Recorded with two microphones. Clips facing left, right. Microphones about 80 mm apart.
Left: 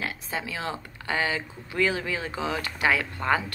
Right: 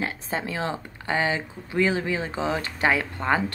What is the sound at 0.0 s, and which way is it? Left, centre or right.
Speech, right.